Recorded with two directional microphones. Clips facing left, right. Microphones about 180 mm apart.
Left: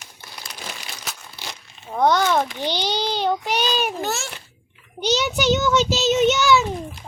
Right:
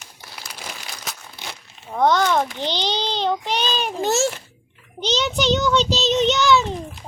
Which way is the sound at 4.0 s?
25° right (ahead or behind).